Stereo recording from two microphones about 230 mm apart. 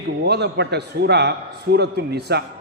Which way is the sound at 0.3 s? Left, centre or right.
Right.